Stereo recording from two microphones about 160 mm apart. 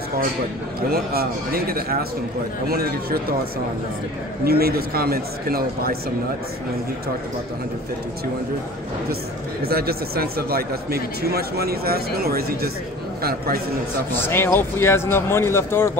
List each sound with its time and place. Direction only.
0.8 s speech: 70° right (ahead or behind)
4.5 s speech: 70° right (ahead or behind)
9.6 s speech: 75° right (ahead or behind)
14.1 s speech: 15° left (ahead or behind)